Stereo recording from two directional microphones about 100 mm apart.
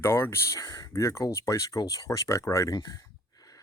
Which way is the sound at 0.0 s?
25° left (ahead or behind).